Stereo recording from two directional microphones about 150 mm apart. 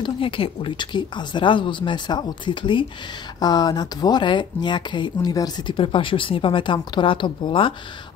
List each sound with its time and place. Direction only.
0.0 s speech: 35° left (ahead or behind)